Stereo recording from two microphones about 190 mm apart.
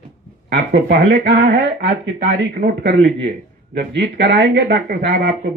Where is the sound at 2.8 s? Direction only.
70° right (ahead or behind).